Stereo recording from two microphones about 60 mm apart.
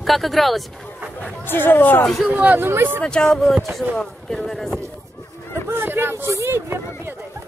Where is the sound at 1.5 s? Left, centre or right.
Left.